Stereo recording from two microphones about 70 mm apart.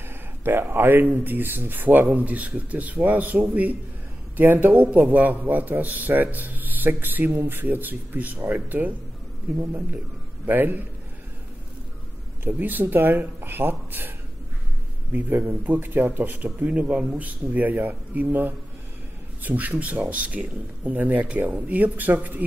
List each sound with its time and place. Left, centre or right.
0.4 s speech: right
12.4 s speech: right
15.1 s speech: right